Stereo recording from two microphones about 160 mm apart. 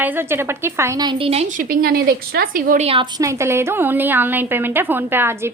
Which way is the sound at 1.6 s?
70° right (ahead or behind).